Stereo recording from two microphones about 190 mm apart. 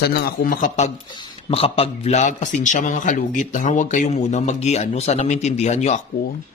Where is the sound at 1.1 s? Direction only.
25° left (ahead or behind).